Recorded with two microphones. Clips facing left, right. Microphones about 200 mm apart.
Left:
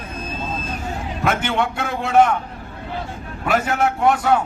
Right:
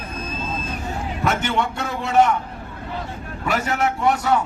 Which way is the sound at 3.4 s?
55° left (ahead or behind).